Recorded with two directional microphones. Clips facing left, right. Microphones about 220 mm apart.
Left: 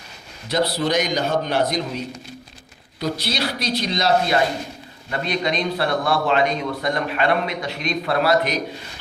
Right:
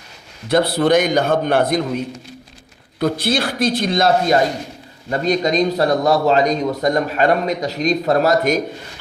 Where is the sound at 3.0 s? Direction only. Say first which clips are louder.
Right 6 dB; 50° right (ahead or behind).